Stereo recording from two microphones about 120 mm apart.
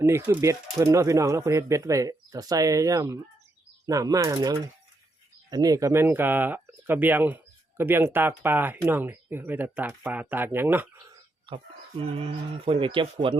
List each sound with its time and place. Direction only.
0.0 s speech: 20° right (ahead or behind)
11.4 s speech: 50° right (ahead or behind)